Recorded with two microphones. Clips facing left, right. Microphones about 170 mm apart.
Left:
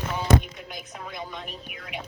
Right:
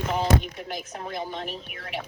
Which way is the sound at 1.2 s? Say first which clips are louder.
Right 4 dB; 30° right (ahead or behind).